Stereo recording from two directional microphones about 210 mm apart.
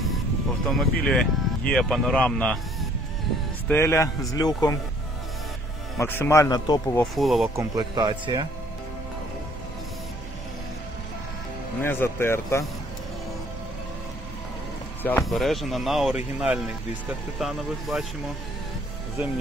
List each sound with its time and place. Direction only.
0.7 s speech: centre (ahead or behind)
3.6 s speech: 10° left (ahead or behind)
5.9 s speech: 10° left (ahead or behind)
7.2 s speech: centre (ahead or behind)
7.5 s speech: 20° right (ahead or behind)
11.8 s speech: 10° left (ahead or behind)
15.0 s speech: 5° left (ahead or behind)